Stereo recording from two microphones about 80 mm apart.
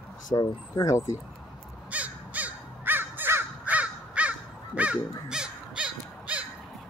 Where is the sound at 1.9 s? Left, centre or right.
Centre.